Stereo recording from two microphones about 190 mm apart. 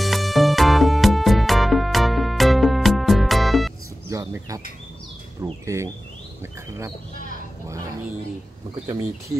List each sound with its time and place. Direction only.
0.0 s music: centre (ahead or behind)
4.1 s bird: 15° right (ahead or behind)
6.4 s speech: 15° right (ahead or behind)